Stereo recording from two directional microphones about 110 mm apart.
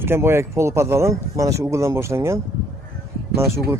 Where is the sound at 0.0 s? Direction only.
20° right (ahead or behind).